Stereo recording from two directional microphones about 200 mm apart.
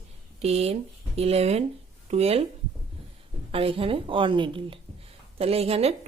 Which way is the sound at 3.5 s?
25° right (ahead or behind).